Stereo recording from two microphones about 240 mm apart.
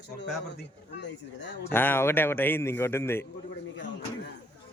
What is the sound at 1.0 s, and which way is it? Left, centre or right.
Speech, left.